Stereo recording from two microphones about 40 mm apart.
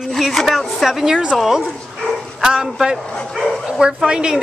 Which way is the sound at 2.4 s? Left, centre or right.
Centre.